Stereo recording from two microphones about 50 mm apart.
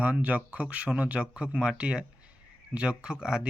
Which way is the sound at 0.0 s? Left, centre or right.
Right.